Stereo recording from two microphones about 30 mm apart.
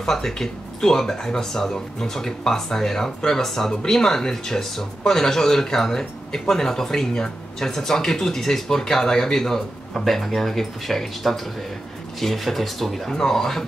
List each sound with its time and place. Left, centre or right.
0.0 s speech: centre
13.1 s speech: centre